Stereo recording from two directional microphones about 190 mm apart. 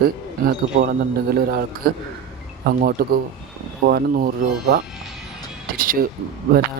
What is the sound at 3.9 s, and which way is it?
Speech, 50° right (ahead or behind).